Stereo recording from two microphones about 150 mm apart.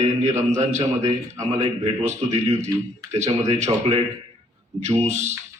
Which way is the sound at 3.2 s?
50° right (ahead or behind).